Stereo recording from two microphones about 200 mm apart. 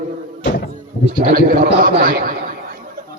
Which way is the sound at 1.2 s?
45° right (ahead or behind).